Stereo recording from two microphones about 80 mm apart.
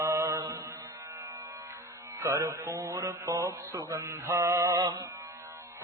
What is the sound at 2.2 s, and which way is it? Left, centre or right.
Mantra, right.